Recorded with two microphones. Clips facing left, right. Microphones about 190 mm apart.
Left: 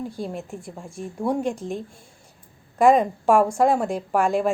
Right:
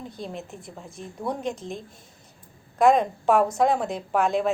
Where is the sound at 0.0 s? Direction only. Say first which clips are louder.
Left 5 dB; 10° left (ahead or behind).